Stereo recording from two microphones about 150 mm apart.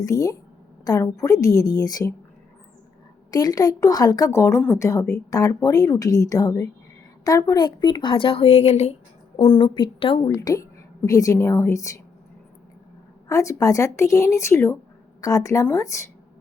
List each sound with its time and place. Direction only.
0.0 s speech: 25° left (ahead or behind)
3.3 s speech: 25° left (ahead or behind); by 9.0 s 45° left (ahead or behind)
9.4 s speech: 35° left (ahead or behind)
10.3 s a woman's voice: 20° left (ahead or behind)
13.2 s speech: 20° left (ahead or behind)